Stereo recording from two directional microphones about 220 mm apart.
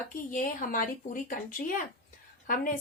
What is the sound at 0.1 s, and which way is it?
A woman's voice, 40° left (ahead or behind).